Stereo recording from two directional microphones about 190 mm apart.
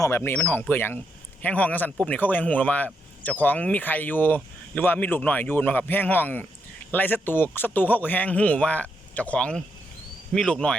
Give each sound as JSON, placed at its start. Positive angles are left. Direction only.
{"t": 0.0, "sound": "speech", "side_deg": 15}